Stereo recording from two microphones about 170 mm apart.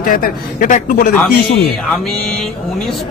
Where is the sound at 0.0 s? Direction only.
55° left (ahead or behind).